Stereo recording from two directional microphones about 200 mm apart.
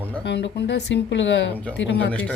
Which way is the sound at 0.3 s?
60° left (ahead or behind).